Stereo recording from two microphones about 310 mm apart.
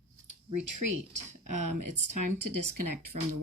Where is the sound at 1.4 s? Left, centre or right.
Right.